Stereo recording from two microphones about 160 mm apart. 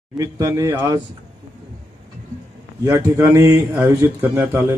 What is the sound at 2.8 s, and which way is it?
A man's voice, 20° right (ahead or behind).